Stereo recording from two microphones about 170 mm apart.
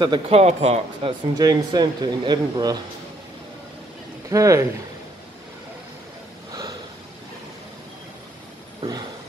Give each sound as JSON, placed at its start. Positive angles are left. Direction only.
{"t": 0.0, "sound": "a man's voice", "side_deg": -30}
{"t": 1.4, "sound": "speech", "side_deg": -25}
{"t": 4.3, "sound": "speech", "side_deg": -20}